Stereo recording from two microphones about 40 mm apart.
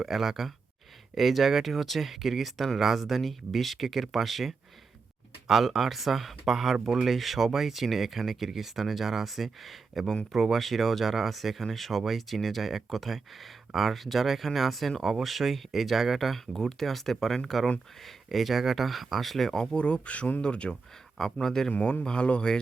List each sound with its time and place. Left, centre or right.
0.0 s speech: centre
19.7 s speech: left
21.2 s speech: centre
21.7 s speech: left